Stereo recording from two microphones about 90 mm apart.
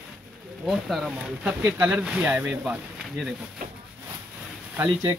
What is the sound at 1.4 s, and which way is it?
Speech, 15° right (ahead or behind).